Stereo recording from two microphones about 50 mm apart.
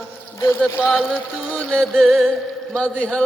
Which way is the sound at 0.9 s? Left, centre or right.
Left.